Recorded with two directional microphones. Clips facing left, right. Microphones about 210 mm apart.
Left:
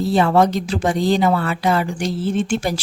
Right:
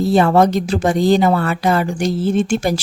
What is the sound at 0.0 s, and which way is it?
Speech, 45° right (ahead or behind).